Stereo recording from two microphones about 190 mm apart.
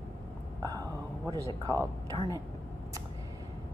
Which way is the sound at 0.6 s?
20° right (ahead or behind).